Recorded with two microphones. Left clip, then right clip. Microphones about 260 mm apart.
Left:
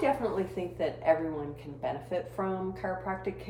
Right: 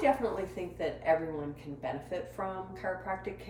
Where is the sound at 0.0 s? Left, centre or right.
Centre.